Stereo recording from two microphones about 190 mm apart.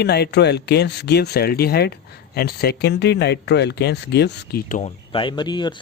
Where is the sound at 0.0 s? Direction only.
60° left (ahead or behind).